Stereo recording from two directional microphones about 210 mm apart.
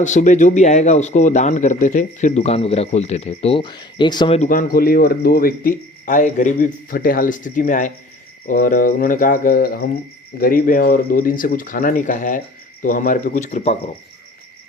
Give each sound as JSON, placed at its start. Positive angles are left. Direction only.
{"t": 0.0, "sound": "speech", "side_deg": 35}
{"t": 4.4, "sound": "speech", "side_deg": 40}